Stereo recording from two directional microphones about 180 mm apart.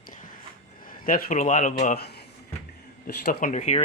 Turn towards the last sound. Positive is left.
turn(degrees=40)  # may be behind; listen again after turning